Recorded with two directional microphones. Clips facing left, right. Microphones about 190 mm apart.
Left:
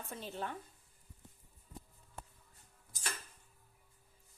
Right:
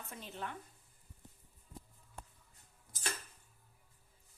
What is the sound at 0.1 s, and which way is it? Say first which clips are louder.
Speech: left 3 dB; 30° left (ahead or behind).